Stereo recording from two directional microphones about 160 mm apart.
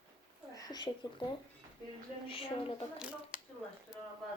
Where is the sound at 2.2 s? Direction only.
35° left (ahead or behind).